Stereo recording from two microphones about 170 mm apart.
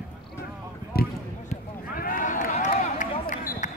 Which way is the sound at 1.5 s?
55° left (ahead or behind).